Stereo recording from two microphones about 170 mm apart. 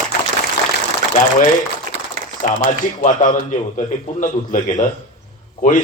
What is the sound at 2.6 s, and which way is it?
A man's voice, 50° left (ahead or behind).